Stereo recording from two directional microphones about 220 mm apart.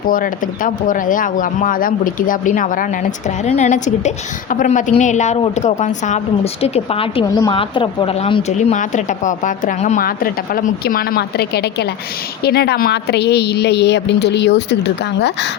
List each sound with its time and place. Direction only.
0.1 s speech: 40° left (ahead or behind)